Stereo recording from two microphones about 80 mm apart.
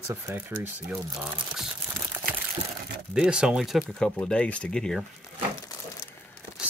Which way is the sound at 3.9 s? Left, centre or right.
Centre.